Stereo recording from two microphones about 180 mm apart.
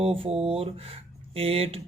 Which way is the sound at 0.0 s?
30° right (ahead or behind).